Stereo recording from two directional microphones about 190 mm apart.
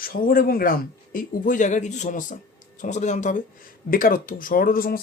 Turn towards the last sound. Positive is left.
turn(degrees=50)  # may be behind; listen again after turning